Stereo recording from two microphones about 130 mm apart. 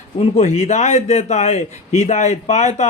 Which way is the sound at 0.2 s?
60° left (ahead or behind).